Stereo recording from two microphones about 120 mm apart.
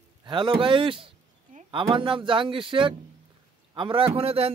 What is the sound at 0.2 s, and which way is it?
Speech, 45° right (ahead or behind).